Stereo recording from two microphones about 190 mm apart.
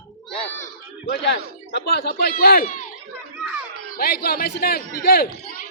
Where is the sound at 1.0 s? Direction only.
60° left (ahead or behind).